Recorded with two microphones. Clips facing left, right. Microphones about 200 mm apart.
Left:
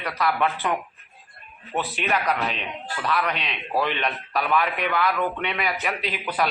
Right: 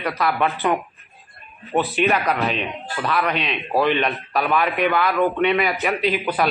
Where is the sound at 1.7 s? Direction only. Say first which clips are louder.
Right 6 dB; 55° right (ahead or behind).